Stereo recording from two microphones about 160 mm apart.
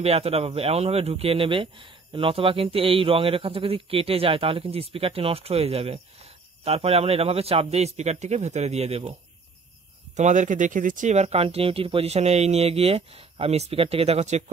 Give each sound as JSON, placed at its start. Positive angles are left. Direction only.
{"t": 0.0, "sound": "speech", "side_deg": -40}
{"t": 10.1, "sound": "speech", "side_deg": -50}